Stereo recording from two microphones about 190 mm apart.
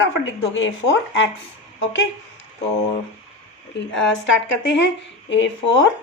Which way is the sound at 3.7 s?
70° left (ahead or behind).